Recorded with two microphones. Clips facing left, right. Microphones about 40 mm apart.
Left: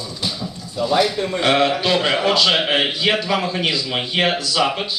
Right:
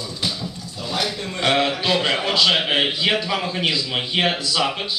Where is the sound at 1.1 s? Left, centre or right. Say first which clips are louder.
Left 7 dB; left.